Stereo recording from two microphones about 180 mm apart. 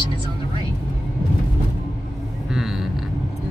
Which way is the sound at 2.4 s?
Centre (ahead or behind).